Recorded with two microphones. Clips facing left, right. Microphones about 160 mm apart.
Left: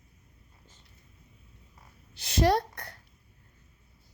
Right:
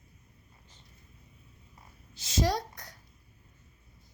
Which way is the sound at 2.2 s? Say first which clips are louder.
Left 5 dB; 60° left (ahead or behind).